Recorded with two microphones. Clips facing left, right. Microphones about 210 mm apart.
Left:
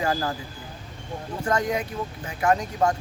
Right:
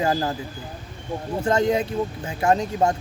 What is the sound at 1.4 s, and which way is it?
Speech, 25° right (ahead or behind).